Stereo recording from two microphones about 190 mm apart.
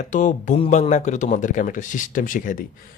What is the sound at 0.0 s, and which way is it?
Speech, 40° left (ahead or behind).